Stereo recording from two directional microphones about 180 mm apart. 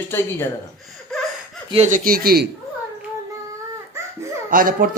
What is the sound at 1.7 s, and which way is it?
Speech, 40° right (ahead or behind).